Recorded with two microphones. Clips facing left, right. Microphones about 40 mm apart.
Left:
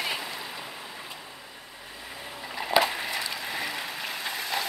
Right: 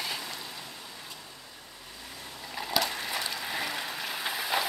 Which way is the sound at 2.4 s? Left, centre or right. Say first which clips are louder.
Left 6 dB; centre.